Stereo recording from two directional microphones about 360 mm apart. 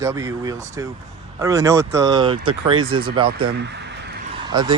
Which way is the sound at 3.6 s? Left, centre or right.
Right.